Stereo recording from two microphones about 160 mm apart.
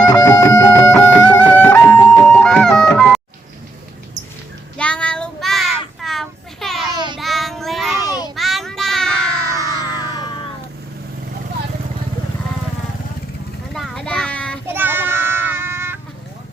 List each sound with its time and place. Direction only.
0.1 s music: 20° left (ahead or behind); by 3.2 s centre (ahead or behind)
4.8 s child singing: 5° left (ahead or behind)
6.9 s child singing: 30° right (ahead or behind)
7.2 s child singing: centre (ahead or behind)
9.6 s a sound: 25° left (ahead or behind)
13.7 s a sound: centre (ahead or behind)
14.7 s child singing: 10° right (ahead or behind)